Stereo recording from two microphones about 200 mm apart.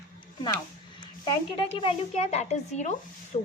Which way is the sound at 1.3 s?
25° left (ahead or behind).